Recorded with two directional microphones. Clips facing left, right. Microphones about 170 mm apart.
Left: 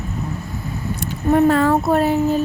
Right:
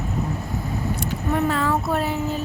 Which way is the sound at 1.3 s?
50° left (ahead or behind).